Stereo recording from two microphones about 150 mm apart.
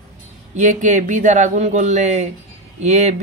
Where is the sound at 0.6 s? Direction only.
55° right (ahead or behind).